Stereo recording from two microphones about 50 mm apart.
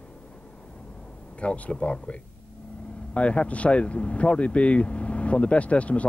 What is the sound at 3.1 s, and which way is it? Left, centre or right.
Speech, left.